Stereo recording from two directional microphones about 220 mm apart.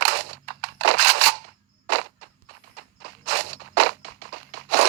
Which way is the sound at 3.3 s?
50° right (ahead or behind).